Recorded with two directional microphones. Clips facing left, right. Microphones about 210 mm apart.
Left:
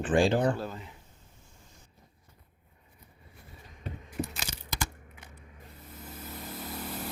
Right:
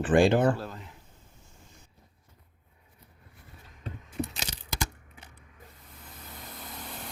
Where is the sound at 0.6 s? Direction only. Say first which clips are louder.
Left 2 dB; centre (ahead or behind).